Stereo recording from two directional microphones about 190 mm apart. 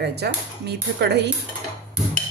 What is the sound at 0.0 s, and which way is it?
Speech, 60° right (ahead or behind).